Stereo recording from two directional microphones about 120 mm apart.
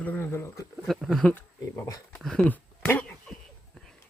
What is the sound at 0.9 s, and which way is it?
Speech, centre (ahead or behind).